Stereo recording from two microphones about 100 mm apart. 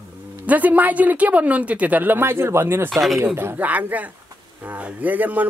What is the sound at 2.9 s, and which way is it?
Speech, centre (ahead or behind).